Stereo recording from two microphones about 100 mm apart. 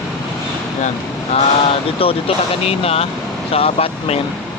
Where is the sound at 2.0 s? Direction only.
70° left (ahead or behind); by 4.2 s 90° left.